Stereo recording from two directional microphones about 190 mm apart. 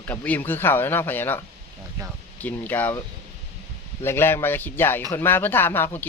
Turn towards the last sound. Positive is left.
turn(degrees=10)  # may be behind; listen again after turning